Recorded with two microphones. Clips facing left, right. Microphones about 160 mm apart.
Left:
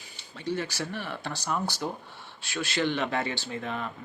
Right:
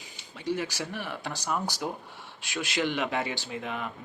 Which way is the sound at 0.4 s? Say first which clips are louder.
Even; 15° right (ahead or behind).